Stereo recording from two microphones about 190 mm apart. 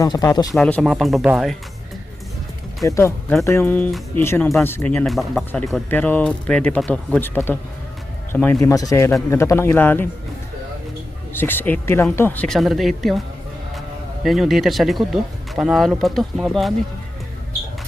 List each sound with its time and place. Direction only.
0.0 s speech: 20° left (ahead or behind)
0.5 s speech: centre (ahead or behind)
2.8 s speech: 15° left (ahead or behind)
11.3 s speech: 10° left (ahead or behind)
14.3 s speech: centre (ahead or behind)